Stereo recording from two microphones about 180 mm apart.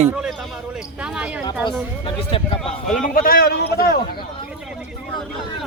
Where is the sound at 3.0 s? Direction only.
50° left (ahead or behind).